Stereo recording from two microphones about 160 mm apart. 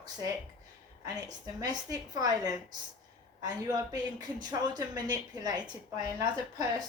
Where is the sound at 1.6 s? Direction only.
25° right (ahead or behind).